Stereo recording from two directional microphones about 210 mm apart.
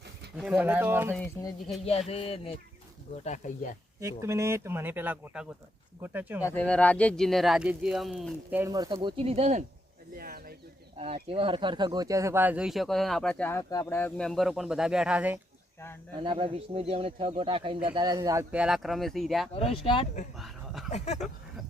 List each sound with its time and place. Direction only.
0.3 s speech: 5° right (ahead or behind)
1.8 s speech: 30° left (ahead or behind)
3.2 s speech: 35° left (ahead or behind)
4.0 s speech: 15° right (ahead or behind)
6.4 s speech: 10° left (ahead or behind)
8.4 s speech: 10° right (ahead or behind); by 9.6 s 30° right (ahead or behind)
10.2 s bird: 45° right (ahead or behind)
10.9 s speech: 30° right (ahead or behind); by 15.4 s 5° right (ahead or behind)
16.1 s speech: 25° right (ahead or behind)
18.5 s speech: 5° right (ahead or behind)
19.5 s speech: 25° left (ahead or behind)
20.3 s chuckle: centre (ahead or behind)
20.9 s speech: 35° left (ahead or behind)